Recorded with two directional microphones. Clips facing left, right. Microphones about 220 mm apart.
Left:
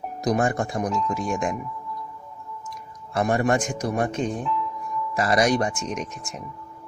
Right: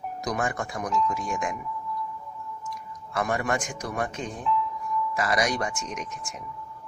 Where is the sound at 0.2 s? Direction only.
30° left (ahead or behind).